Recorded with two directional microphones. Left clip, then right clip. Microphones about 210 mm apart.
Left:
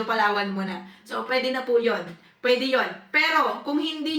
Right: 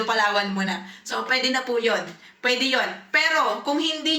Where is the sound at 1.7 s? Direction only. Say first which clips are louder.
Left 3 dB; 20° right (ahead or behind).